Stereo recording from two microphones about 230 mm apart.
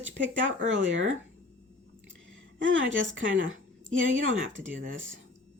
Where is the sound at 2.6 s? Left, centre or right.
Right.